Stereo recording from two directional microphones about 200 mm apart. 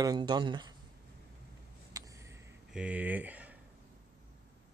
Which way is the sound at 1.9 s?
15° right (ahead or behind).